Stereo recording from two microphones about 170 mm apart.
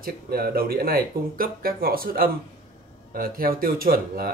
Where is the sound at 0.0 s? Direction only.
65° right (ahead or behind).